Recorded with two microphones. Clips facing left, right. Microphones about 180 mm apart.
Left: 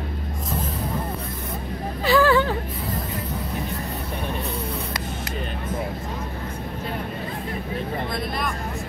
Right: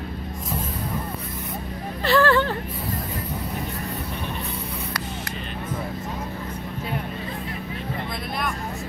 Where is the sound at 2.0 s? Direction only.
5° left (ahead or behind).